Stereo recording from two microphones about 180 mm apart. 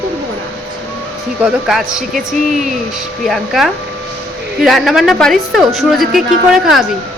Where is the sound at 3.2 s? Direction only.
Centre (ahead or behind).